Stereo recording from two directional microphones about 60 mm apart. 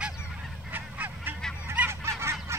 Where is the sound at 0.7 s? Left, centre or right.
Right.